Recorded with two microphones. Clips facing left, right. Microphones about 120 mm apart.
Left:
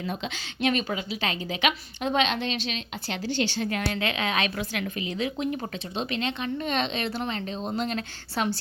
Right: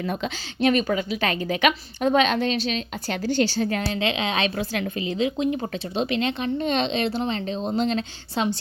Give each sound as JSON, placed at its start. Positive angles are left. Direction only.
{"t": 0.0, "sound": "speech", "side_deg": -55}
{"t": 0.3, "sound": "a woman's voice", "side_deg": -40}
{"t": 3.9, "sound": "a woman's voice", "side_deg": -25}
{"t": 5.7, "sound": "a woman's voice", "side_deg": -35}